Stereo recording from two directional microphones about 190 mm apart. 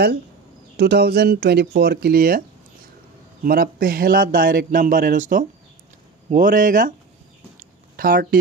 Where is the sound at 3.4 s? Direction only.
50° right (ahead or behind).